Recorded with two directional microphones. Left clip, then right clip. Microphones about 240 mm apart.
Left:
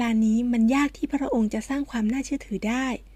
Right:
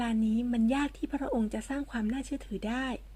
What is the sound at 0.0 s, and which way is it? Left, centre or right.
Speech, left.